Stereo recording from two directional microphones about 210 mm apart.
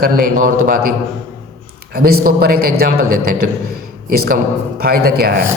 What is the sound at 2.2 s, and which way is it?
A man's voice, 45° right (ahead or behind).